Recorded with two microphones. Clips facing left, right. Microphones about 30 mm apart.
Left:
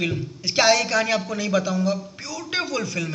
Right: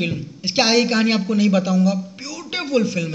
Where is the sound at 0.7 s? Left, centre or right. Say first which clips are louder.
Right 3 dB; right.